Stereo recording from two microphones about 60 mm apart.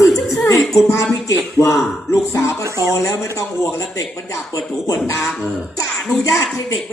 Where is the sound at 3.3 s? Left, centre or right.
Left.